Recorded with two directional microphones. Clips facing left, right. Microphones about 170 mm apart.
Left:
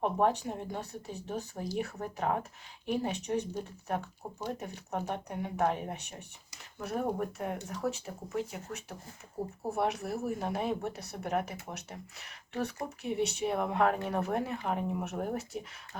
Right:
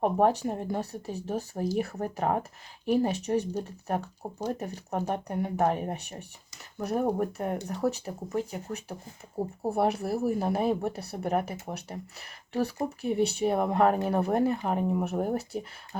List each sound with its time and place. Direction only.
0.0 s speech: 40° right (ahead or behind)